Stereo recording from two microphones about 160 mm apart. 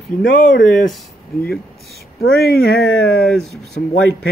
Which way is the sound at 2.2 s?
80° left.